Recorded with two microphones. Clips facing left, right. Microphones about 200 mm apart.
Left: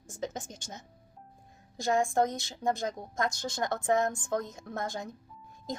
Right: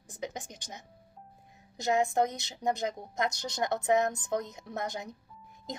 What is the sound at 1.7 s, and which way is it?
A woman's voice, 20° right (ahead or behind).